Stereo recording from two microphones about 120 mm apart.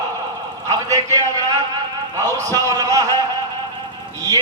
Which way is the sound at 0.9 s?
30° right (ahead or behind).